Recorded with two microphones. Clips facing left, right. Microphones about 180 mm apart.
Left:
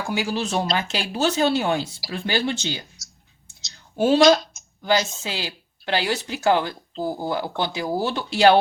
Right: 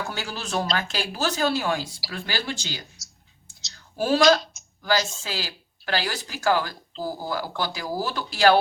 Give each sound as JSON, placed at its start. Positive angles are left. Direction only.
{"t": 0.1, "sound": "speech", "side_deg": 15}
{"t": 3.9, "sound": "speech", "side_deg": 20}